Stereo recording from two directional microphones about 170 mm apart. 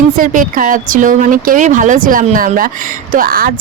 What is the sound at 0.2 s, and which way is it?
A woman's voice, 55° right (ahead or behind).